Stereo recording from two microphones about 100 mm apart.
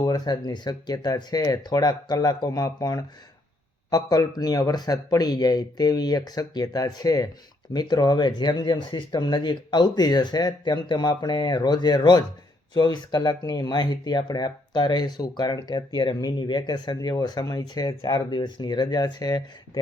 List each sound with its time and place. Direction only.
0.0 s speech: 40° left (ahead or behind)